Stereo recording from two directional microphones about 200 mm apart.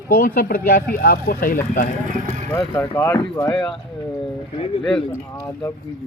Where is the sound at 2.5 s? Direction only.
15° left (ahead or behind).